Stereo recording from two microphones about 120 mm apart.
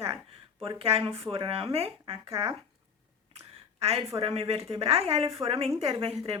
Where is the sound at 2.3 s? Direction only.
25° right (ahead or behind).